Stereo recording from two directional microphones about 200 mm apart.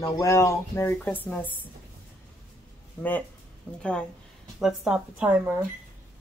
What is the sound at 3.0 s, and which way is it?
Speech, 10° left (ahead or behind).